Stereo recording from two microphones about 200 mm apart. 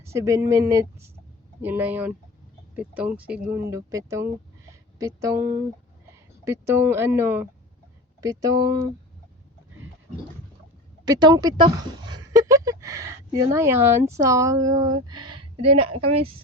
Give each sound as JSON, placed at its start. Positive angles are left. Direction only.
{"t": 0.0, "sound": "speech", "side_deg": -15}
{"t": 6.4, "sound": "speech", "side_deg": -15}
{"t": 11.0, "sound": "speech", "side_deg": -20}